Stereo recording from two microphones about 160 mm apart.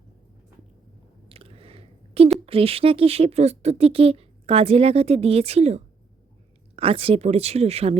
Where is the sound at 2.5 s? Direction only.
35° right (ahead or behind).